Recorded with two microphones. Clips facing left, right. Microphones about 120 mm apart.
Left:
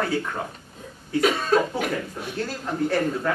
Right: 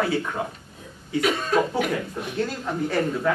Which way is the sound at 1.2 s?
40° left (ahead or behind).